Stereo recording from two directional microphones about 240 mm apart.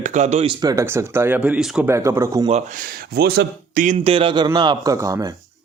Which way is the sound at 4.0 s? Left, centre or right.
Right.